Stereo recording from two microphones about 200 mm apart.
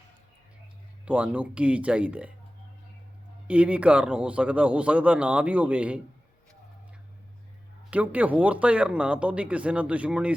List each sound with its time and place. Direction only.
1.0 s a man's voice: 5° right (ahead or behind)
3.4 s a man's voice: 5° right (ahead or behind)
7.9 s a man's voice: 5° right (ahead or behind)